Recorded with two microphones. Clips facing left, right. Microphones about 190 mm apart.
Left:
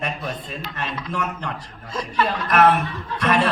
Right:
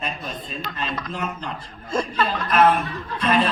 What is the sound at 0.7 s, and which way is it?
Speech, 50° right (ahead or behind).